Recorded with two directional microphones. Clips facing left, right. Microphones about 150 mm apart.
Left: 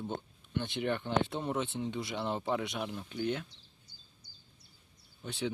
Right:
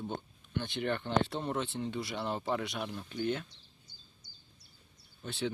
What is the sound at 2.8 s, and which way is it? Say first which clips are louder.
Speech: even; 5° left (ahead or behind).